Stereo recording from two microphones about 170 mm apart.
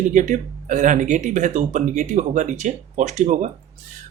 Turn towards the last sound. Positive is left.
turn(degrees=-45)  # may be behind; listen again after turning